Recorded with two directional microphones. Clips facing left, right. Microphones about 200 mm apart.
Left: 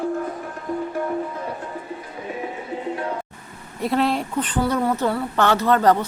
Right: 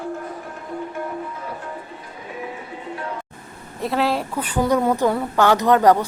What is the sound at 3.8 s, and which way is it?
A woman's voice, centre (ahead or behind).